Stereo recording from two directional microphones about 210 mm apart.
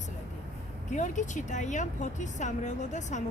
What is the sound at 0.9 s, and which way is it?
A woman's voice, 35° left (ahead or behind).